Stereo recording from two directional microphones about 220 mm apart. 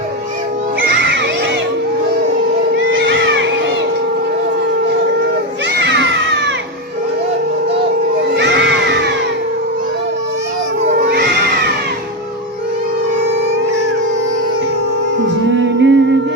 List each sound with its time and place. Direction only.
0.8 s children playing: 50° right (ahead or behind)
2.9 s music: 55° right (ahead or behind)
5.8 s children playing: 55° right (ahead or behind)
8.4 s music: 55° right (ahead or behind)
11.1 s music: 45° right (ahead or behind)
15.5 s music: 55° right (ahead or behind)